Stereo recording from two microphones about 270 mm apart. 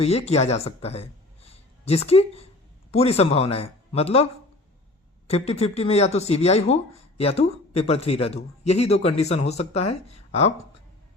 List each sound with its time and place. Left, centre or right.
0.0 s speech: left
1.5 s a sound: left
2.9 s speech: left
5.3 s speech: left